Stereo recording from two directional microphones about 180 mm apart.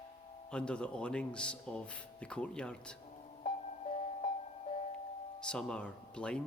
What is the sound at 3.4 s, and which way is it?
Music, 30° left (ahead or behind).